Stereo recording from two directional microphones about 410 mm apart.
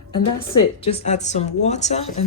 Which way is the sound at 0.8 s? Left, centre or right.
Centre.